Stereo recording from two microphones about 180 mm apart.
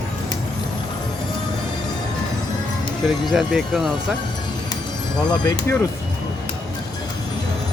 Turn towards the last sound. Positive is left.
turn(degrees=20)  # may be behind; listen again after turning